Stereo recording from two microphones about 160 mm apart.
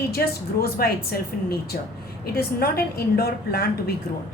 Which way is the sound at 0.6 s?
70° left (ahead or behind).